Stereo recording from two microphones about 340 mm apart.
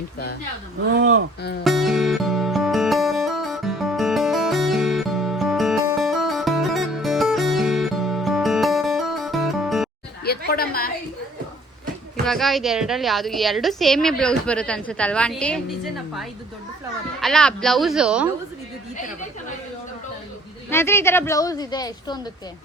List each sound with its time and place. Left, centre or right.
0.9 s speech: right
1.6 s music: centre
10.2 s speech: left
12.2 s a woman's voice: centre
20.7 s a woman's voice: centre